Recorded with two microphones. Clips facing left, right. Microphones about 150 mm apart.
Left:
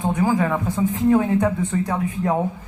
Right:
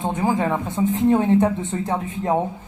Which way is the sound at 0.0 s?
25° right (ahead or behind).